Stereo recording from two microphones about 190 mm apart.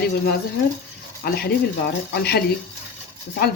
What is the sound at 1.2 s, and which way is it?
Speech, 55° left (ahead or behind).